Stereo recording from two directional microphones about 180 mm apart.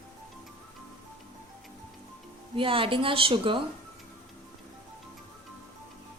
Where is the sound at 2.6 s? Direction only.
30° right (ahead or behind).